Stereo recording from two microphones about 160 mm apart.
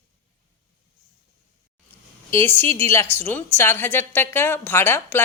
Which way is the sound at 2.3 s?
15° left (ahead or behind).